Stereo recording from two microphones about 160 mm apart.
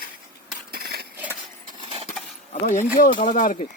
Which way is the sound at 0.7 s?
75° right (ahead or behind).